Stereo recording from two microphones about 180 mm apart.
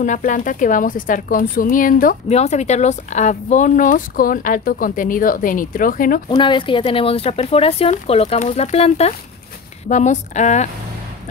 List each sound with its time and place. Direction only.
0.0 s speech: 45° left (ahead or behind)
6.2 s speech: 25° left (ahead or behind)